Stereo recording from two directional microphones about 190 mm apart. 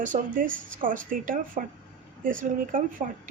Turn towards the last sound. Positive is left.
turn(degrees=-45)  # may be behind; listen again after turning